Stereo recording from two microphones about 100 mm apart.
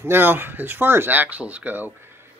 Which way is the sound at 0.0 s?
20° right (ahead or behind).